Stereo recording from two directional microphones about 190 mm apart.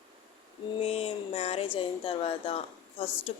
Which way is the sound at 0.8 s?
30° left (ahead or behind).